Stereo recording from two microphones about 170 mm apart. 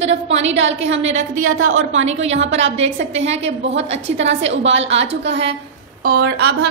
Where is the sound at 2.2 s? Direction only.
90° right.